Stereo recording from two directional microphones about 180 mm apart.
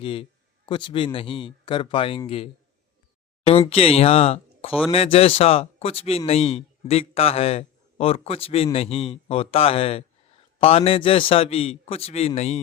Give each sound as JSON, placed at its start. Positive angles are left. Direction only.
{"t": 0.0, "sound": "speech", "side_deg": 30}
{"t": 3.7, "sound": "speech", "side_deg": 35}